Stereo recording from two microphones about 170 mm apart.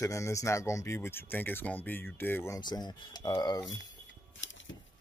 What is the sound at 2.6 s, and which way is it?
Speech, 25° left (ahead or behind).